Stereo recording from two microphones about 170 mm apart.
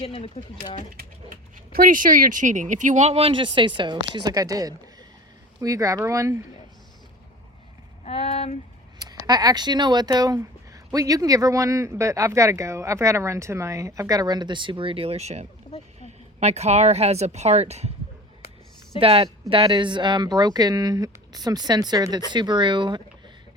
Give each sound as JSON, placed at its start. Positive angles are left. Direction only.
{"t": 0.0, "sound": "speech", "side_deg": 35}
{"t": 0.9, "sound": "speech", "side_deg": -55}
{"t": 8.0, "sound": "a sound", "side_deg": 35}
{"t": 9.2, "sound": "speech", "side_deg": -20}
{"t": 18.9, "sound": "speech", "side_deg": -35}